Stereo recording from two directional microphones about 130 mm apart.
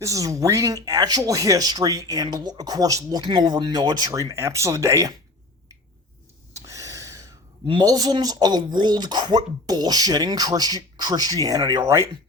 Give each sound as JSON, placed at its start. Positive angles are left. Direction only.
{"t": 0.0, "sound": "speech", "side_deg": -25}
{"t": 6.5, "sound": "gasp", "side_deg": -25}
{"t": 7.7, "sound": "speech", "side_deg": -30}